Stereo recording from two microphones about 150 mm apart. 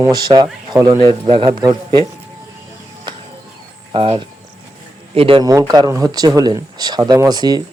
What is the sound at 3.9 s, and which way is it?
Speech, 35° right (ahead or behind).